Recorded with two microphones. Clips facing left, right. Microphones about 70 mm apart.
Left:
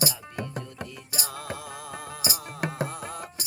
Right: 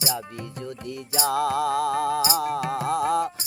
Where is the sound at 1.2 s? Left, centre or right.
Right.